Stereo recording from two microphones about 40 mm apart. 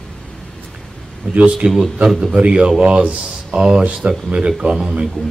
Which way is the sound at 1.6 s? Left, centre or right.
Right.